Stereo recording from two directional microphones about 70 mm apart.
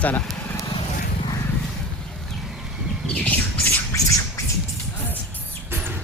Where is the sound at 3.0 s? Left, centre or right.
Centre.